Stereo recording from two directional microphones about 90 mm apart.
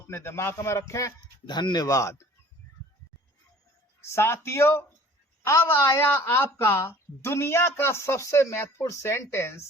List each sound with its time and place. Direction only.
0.1 s a man's voice: 30° left (ahead or behind)
1.5 s speech: 55° left (ahead or behind); by 2.2 s 35° left (ahead or behind)
4.0 s a woman's voice: 30° left (ahead or behind)